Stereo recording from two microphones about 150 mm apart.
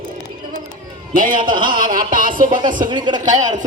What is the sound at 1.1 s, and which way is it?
A man's voice, 65° right (ahead or behind).